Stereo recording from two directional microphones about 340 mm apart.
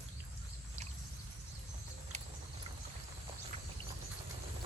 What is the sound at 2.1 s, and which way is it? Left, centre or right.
Horse, centre.